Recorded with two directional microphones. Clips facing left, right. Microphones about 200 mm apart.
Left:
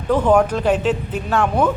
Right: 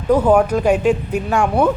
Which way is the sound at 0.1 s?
5° right (ahead or behind).